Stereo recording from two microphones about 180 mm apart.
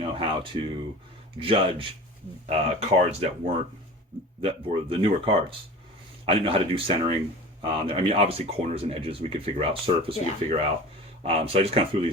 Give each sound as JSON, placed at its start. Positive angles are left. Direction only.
{"t": 0.0, "sound": "speech", "side_deg": -30}
{"t": 3.1, "sound": "speech", "side_deg": -35}